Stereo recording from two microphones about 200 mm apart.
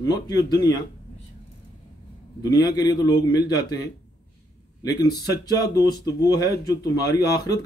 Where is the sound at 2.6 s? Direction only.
20° left (ahead or behind).